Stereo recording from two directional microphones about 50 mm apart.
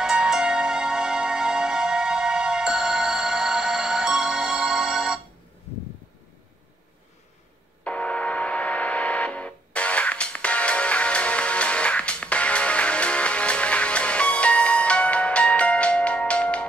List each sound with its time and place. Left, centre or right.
0.0 s music: centre
7.8 s gong: left